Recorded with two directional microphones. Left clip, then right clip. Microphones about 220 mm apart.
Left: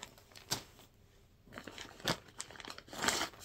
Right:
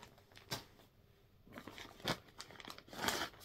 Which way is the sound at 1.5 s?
5° left (ahead or behind).